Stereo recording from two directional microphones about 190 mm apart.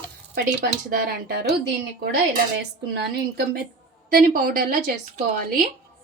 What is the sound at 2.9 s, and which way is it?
A woman's voice, 55° right (ahead or behind).